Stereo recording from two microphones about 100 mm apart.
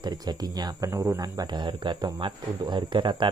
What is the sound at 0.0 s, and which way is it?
Speech, 45° right (ahead or behind).